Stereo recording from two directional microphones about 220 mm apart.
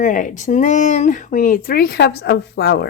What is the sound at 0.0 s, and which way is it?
Speech, 35° left (ahead or behind).